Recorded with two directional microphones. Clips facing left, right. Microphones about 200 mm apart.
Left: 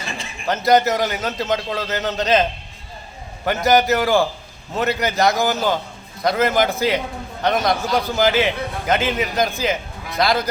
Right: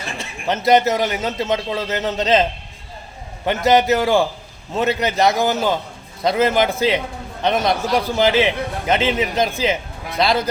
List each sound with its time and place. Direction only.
0.4 s a man's voice: 25° right (ahead or behind)